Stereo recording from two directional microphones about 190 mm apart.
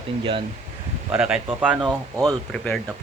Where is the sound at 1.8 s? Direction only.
20° right (ahead or behind).